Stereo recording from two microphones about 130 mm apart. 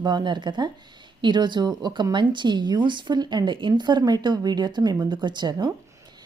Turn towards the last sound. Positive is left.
turn(degrees=-35)  # may be behind; listen again after turning